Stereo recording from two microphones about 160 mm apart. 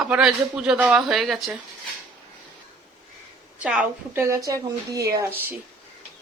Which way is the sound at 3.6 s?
5° right (ahead or behind).